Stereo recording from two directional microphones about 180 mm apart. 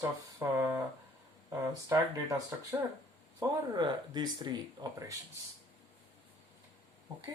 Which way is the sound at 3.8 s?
25° right (ahead or behind).